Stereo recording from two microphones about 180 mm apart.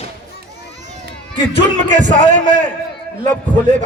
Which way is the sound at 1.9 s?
45° right (ahead or behind).